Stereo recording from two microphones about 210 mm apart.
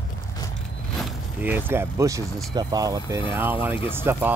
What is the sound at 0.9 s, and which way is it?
Speech, 10° right (ahead or behind).